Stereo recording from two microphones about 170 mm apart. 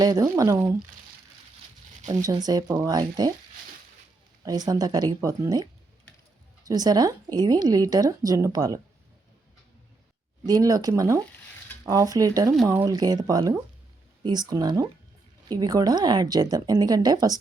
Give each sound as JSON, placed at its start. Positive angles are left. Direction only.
{"t": 0.0, "sound": "a woman's voice", "side_deg": -20}
{"t": 2.0, "sound": "a woman's voice", "side_deg": -20}
{"t": 4.4, "sound": "a woman's voice", "side_deg": -25}
{"t": 6.7, "sound": "a woman's voice", "side_deg": -20}
{"t": 10.4, "sound": "a woman's voice", "side_deg": -20}